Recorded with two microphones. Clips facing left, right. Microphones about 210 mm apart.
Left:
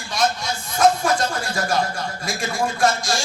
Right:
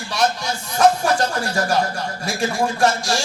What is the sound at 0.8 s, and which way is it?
A man's voice, 35° right (ahead or behind).